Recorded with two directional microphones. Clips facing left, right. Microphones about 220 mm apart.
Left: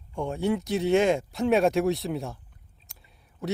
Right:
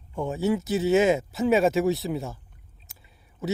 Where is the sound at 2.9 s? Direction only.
5° right (ahead or behind).